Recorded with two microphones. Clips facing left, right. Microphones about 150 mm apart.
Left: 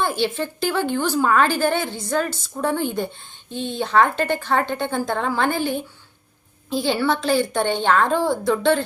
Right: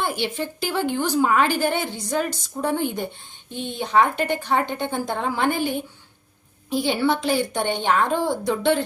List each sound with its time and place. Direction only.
0.0 s a woman's voice: 15° right (ahead or behind)